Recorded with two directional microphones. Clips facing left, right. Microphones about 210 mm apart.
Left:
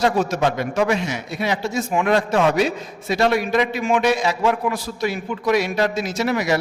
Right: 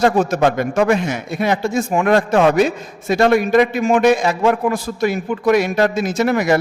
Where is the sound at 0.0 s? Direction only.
50° right (ahead or behind).